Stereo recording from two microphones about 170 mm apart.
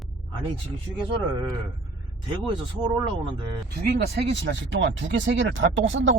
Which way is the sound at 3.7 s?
75° right (ahead or behind).